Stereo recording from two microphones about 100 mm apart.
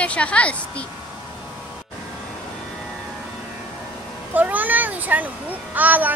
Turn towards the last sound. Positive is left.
turn(degrees=-15)  # may be behind; listen again after turning